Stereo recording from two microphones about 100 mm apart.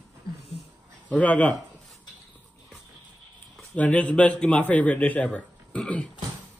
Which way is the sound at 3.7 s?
15° left (ahead or behind).